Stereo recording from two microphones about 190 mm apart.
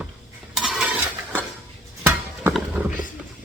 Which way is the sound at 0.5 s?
Centre (ahead or behind).